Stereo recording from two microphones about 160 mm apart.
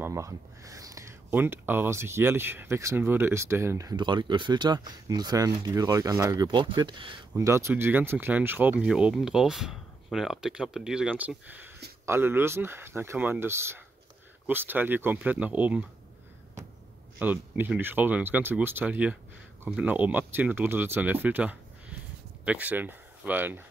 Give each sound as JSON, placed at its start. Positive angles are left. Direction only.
{"t": 0.0, "sound": "speech", "side_deg": -20}
{"t": 7.3, "sound": "speech", "side_deg": -20}
{"t": 17.2, "sound": "speech", "side_deg": -10}